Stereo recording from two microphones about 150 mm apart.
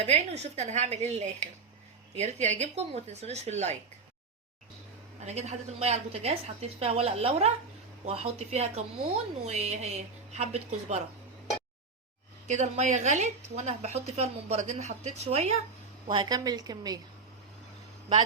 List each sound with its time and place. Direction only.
0.0 s speech: 45° right (ahead or behind)
5.2 s speech: 50° right (ahead or behind)
12.5 s speech: 50° right (ahead or behind)
16.0 s a woman's voice: 30° right (ahead or behind)